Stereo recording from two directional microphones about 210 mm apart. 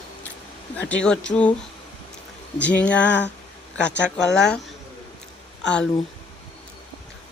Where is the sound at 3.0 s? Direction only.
60° left (ahead or behind).